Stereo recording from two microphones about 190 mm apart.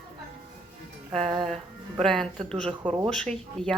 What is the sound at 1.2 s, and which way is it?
Speech, 25° right (ahead or behind).